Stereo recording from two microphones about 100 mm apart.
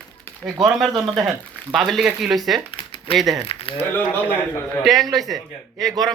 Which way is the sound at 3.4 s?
75° left (ahead or behind).